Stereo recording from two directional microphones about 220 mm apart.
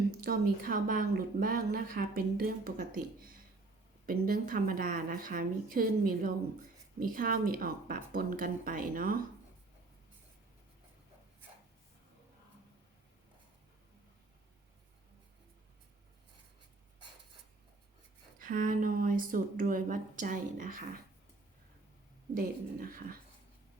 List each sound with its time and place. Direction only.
0.3 s a woman's voice: 40° right (ahead or behind)
18.3 s a woman's voice: 40° right (ahead or behind)
22.4 s a woman's voice: 40° right (ahead or behind)